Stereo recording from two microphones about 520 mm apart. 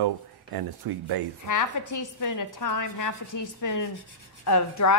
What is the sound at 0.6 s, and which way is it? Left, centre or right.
Speech, right.